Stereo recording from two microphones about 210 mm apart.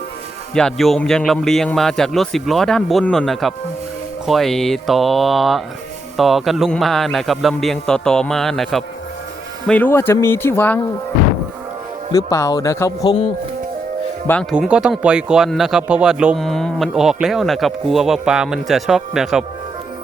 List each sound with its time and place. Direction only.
0.5 s speech: centre (ahead or behind)
12.1 s speech: 15° left (ahead or behind)
14.5 s speech: 5° right (ahead or behind)